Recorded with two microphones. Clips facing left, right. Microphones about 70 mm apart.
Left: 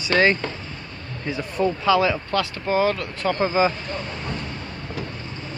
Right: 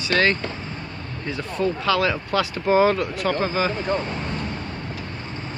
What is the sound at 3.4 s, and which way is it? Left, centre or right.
Speech, centre.